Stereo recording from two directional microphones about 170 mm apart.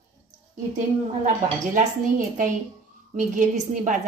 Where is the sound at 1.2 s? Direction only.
40° right (ahead or behind).